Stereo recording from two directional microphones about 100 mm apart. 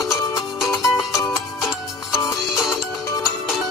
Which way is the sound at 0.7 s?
35° left (ahead or behind).